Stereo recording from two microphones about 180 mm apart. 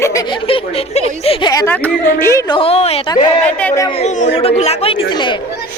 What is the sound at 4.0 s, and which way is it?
Speech, 40° left (ahead or behind).